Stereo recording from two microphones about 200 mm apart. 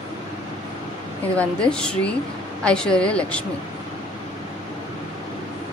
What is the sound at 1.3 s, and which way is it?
A woman's voice, 5° left (ahead or behind).